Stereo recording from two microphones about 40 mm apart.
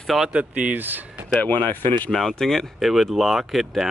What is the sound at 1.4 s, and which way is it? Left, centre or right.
Speech, left.